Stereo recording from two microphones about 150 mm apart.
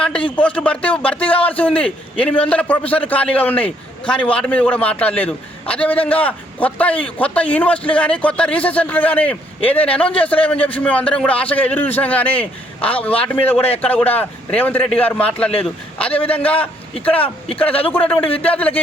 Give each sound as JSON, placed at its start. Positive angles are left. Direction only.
{"t": 0.3, "sound": "a man's voice", "side_deg": 10}
{"t": 18.2, "sound": "a man's voice", "side_deg": 40}
{"t": 18.4, "sound": "a man's voice", "side_deg": 10}